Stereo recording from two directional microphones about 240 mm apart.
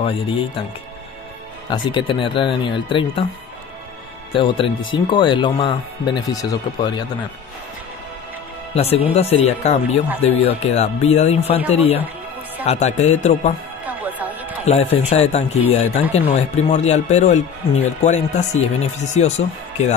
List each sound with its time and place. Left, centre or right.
0.0 s speech: left
1.7 s speech: centre
4.3 s speech: left
8.7 s speech: left
13.8 s music: centre
14.6 s a man's voice: left